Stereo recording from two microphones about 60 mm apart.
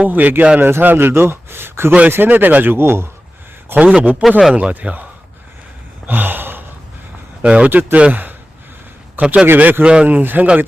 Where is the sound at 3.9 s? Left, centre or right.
Right.